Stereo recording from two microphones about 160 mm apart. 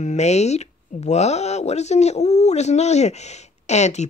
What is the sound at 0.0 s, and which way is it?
Speech, 45° left (ahead or behind).